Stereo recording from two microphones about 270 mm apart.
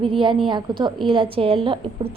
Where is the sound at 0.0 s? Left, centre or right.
Centre.